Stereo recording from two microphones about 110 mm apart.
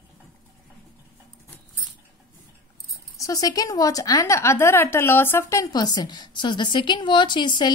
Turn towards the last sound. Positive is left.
turn(degrees=45)  # may be behind; listen again after turning